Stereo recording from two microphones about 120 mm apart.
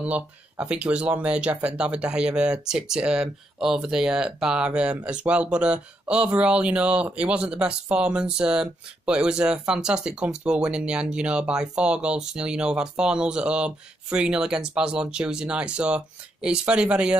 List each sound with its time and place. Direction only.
0.0 s speech: 10° right (ahead or behind)